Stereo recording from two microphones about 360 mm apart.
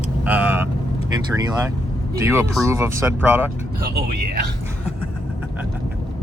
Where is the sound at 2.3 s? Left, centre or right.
Centre.